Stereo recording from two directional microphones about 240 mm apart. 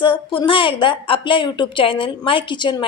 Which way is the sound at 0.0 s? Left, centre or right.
Left.